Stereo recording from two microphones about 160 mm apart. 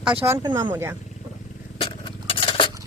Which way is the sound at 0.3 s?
20° right (ahead or behind).